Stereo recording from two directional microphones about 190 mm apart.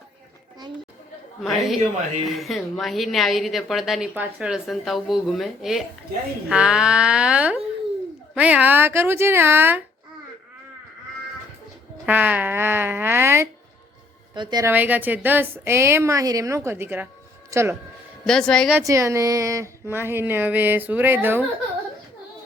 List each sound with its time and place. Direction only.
1.4 s a woman's voice: centre (ahead or behind)
12.0 s a woman's voice: 10° right (ahead or behind)
14.7 s speech: 10° right (ahead or behind)
18.3 s a woman's voice: 5° left (ahead or behind)
18.9 s speech: 15° right (ahead or behind)